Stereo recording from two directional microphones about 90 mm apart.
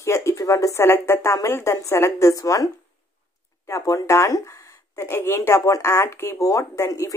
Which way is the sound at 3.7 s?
35° left (ahead or behind).